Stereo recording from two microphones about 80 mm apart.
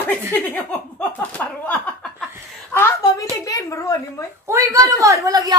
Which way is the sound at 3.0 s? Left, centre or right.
Left.